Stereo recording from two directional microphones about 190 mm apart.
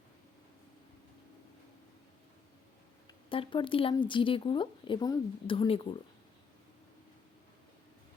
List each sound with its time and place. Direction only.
3.2 s speech: 25° left (ahead or behind)